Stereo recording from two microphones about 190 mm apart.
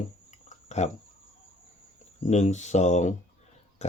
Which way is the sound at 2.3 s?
40° left (ahead or behind).